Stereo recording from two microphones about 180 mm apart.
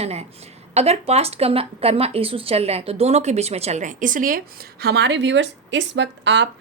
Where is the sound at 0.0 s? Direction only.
35° right (ahead or behind).